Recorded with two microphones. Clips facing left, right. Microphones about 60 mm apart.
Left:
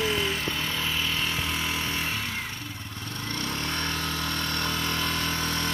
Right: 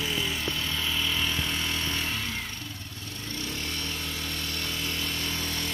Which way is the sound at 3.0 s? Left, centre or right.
Left.